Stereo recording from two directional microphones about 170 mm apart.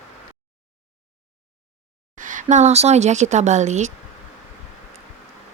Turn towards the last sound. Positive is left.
turn(degrees=-45)  # may be behind; listen again after turning